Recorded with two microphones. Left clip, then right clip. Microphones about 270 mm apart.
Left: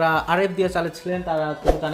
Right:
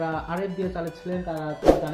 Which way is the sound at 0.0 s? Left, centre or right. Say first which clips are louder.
Left 9 dB; left.